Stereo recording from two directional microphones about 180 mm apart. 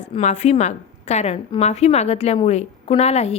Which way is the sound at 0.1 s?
40° left (ahead or behind).